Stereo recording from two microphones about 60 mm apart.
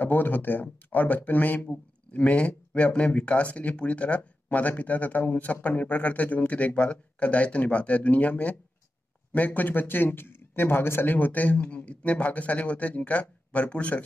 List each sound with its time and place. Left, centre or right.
0.0 s speech: left